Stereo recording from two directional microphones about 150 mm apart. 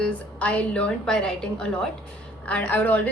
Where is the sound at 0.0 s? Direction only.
10° left (ahead or behind).